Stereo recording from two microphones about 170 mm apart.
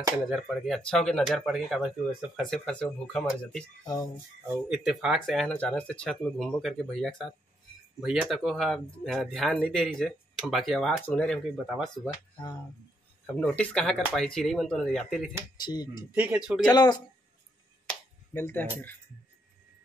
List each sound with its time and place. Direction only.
0.3 s speech: centre (ahead or behind)
3.8 s speech: 25° left (ahead or behind)
4.6 s speech: 5° right (ahead or behind)
13.4 s speech: 5° left (ahead or behind)
15.5 s speech: 25° left (ahead or behind)
16.2 s speech: 5° right (ahead or behind)
16.6 s speech: 25° left (ahead or behind)
17.8 s finger snapping: 10° left (ahead or behind)